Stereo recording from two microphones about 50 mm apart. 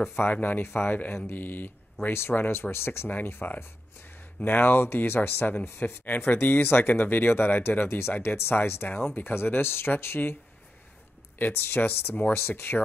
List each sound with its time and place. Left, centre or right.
0.3 s speech: left
0.7 s speech: left
8.8 s speech: left
11.3 s speech: left